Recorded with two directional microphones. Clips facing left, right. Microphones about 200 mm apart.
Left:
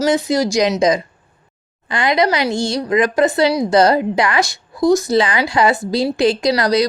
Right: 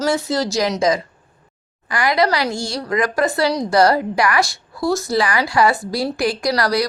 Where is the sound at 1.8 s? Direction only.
25° left (ahead or behind).